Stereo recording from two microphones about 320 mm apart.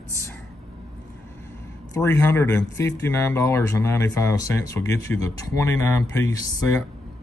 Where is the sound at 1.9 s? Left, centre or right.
Centre.